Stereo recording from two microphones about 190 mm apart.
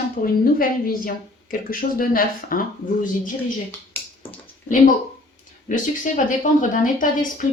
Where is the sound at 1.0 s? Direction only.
50° left (ahead or behind).